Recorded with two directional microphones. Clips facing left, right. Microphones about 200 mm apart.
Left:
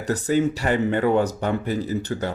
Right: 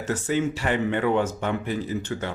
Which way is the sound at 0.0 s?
40° left (ahead or behind).